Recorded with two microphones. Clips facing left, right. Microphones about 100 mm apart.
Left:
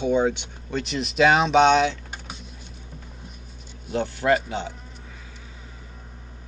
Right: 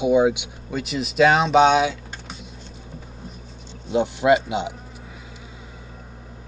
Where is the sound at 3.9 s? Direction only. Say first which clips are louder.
Right 4 dB; 15° right (ahead or behind).